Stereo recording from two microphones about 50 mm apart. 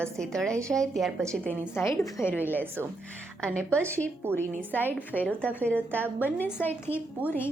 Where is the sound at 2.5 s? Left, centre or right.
Right.